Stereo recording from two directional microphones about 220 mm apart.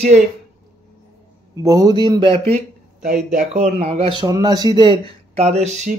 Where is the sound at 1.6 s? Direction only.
20° right (ahead or behind).